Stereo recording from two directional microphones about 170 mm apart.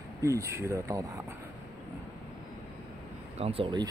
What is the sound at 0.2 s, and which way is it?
Speech, 20° right (ahead or behind).